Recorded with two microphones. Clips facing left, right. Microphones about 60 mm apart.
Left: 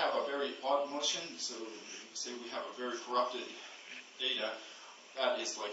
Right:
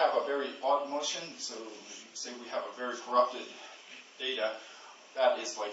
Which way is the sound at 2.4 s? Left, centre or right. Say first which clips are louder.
Right 5 dB; centre.